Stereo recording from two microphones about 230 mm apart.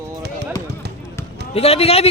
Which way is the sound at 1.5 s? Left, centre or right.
Left.